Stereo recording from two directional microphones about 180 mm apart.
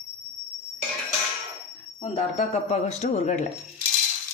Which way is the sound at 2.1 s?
35° left (ahead or behind).